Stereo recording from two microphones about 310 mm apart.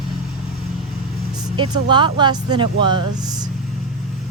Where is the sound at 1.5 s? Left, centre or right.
Centre.